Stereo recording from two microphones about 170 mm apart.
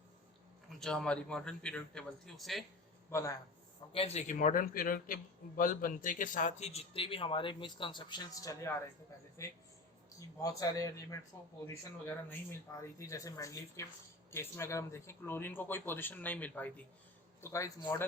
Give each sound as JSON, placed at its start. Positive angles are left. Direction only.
{"t": 0.7, "sound": "a man's voice", "side_deg": 5}
{"t": 3.1, "sound": "speech", "side_deg": 15}
{"t": 3.9, "sound": "a man's voice", "side_deg": 35}
{"t": 10.2, "sound": "speech", "side_deg": 20}